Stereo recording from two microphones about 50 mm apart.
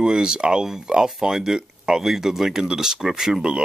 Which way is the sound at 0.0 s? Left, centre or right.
Centre.